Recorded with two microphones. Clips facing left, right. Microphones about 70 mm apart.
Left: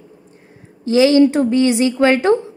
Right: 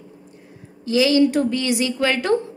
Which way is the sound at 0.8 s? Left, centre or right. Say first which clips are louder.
Left 5 dB; left.